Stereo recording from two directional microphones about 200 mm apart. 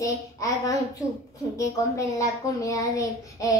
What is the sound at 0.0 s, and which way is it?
A child's voice, 15° left (ahead or behind).